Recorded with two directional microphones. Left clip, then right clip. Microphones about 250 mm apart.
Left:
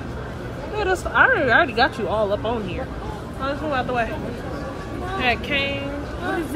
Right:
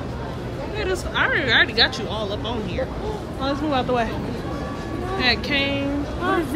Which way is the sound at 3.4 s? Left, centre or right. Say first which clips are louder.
Right 1 dB; centre.